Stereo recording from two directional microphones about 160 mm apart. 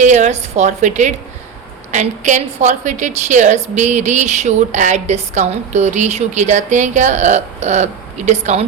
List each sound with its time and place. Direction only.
0.0 s a woman's voice: 45° right (ahead or behind)